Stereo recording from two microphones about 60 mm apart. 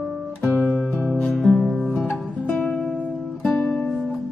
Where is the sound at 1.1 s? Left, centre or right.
Left.